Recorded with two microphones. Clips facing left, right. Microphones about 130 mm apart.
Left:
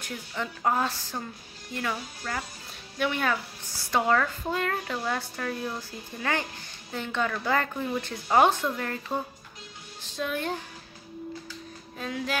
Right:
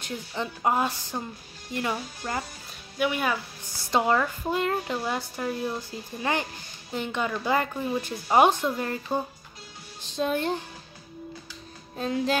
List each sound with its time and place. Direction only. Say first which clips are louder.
0.0 s speech: right 2 dB; 20° right (ahead or behind)
3.0 s speech: right 1 dB; 10° right (ahead or behind); by 10.6 s 25° right (ahead or behind)
12.0 s speech: right 6 dB; 30° right (ahead or behind)